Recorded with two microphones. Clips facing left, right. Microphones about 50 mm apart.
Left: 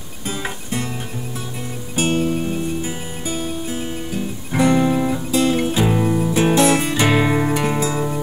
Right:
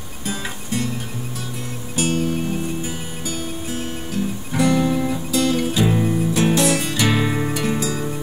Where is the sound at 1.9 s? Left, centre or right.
Left.